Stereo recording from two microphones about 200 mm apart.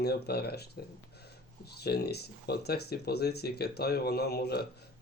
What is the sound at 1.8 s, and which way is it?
Speech, 55° left (ahead or behind).